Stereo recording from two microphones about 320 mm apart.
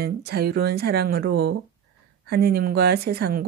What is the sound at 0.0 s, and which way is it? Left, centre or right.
Speech, right.